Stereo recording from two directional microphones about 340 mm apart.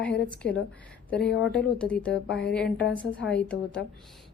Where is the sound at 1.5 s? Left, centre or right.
Centre.